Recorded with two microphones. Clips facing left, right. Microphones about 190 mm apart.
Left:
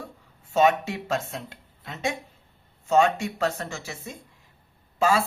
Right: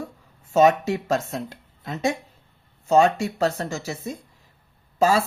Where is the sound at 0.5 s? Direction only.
40° right (ahead or behind).